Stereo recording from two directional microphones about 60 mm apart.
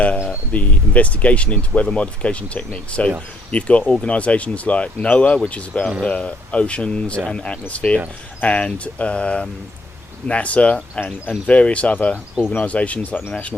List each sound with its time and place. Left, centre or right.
0.5 s speech: left